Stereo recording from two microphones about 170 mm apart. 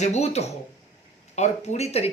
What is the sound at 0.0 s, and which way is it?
Speech, 40° left (ahead or behind).